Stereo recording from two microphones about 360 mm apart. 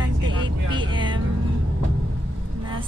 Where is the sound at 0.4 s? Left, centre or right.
Centre.